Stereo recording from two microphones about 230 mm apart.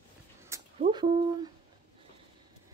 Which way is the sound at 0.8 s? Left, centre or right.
Right.